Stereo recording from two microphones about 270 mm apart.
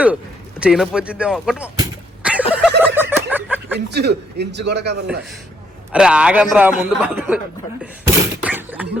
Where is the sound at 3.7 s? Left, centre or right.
Right.